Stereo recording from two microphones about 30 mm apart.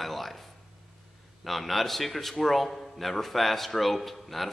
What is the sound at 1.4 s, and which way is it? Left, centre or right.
Speech, centre.